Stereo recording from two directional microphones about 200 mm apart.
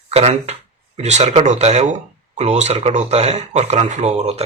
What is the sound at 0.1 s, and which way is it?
Speech, 35° right (ahead or behind).